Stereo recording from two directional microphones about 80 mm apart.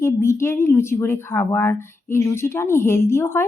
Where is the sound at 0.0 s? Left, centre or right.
Left.